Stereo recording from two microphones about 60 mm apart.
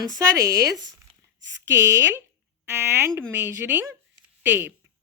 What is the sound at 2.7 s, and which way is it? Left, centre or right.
Speech, right.